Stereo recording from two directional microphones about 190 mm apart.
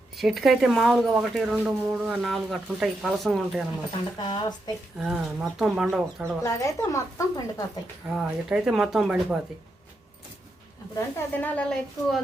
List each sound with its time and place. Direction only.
0.2 s speech: centre (ahead or behind)
4.3 s speech: 20° left (ahead or behind)
4.9 s speech: 5° right (ahead or behind)
6.4 s a woman's voice: 15° left (ahead or behind)
8.1 s speech: 5° right (ahead or behind)
10.9 s a woman's voice: 10° left (ahead or behind)